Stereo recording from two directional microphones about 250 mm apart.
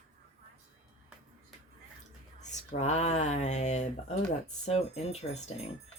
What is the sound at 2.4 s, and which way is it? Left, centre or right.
Speech, left.